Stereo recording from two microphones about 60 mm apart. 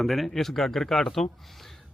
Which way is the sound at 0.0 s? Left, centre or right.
Centre.